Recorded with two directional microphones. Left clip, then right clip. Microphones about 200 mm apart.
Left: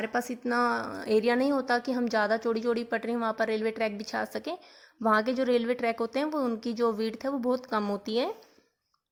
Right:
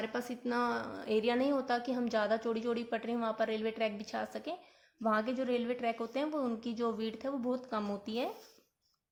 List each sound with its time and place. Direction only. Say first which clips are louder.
0.0 s a woman's voice: left 7 dB; 35° left (ahead or behind)